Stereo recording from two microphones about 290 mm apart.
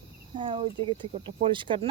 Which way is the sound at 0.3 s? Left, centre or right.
Centre.